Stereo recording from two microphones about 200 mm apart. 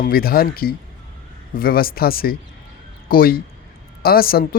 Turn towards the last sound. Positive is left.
turn(degrees=50)  # may be behind; listen again after turning